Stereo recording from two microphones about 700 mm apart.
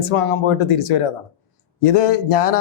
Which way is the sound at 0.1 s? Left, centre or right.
Left.